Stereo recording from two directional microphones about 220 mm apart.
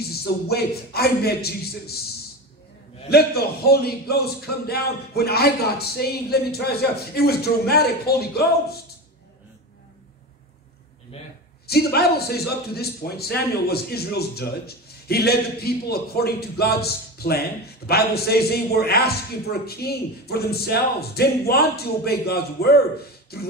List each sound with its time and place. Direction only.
0.0 s a man's voice: 45° left (ahead or behind)
3.1 s a man's voice: 45° left (ahead or behind)
11.6 s a man's voice: 45° left (ahead or behind)